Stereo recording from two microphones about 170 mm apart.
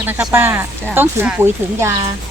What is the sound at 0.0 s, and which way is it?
Speech, 10° right (ahead or behind).